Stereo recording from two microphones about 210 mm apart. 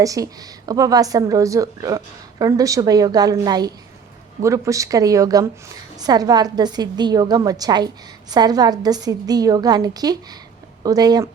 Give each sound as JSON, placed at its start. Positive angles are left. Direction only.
{"t": 0.0, "sound": "a woman's voice", "side_deg": -15}